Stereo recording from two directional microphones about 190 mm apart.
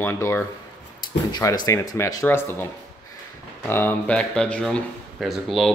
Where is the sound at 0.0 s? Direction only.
10° left (ahead or behind).